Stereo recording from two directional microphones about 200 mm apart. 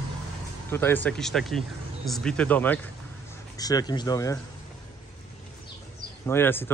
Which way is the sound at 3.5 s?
20° left (ahead or behind).